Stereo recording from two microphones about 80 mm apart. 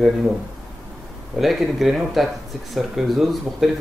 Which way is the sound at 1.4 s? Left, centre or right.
Centre.